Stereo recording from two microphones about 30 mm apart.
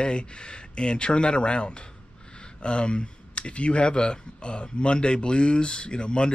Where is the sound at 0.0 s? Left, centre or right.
Left.